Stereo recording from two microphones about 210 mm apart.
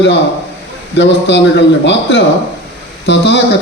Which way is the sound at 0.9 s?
55° left (ahead or behind).